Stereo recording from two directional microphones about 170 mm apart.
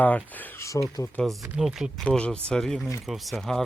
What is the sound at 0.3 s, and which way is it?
Speech, 10° left (ahead or behind).